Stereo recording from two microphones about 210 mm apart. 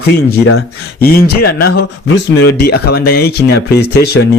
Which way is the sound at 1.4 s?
50° left (ahead or behind).